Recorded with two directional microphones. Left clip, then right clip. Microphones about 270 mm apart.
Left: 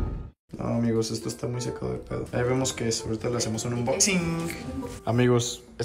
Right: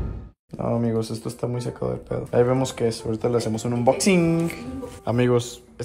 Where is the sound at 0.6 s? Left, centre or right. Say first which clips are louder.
Right 3 dB; centre.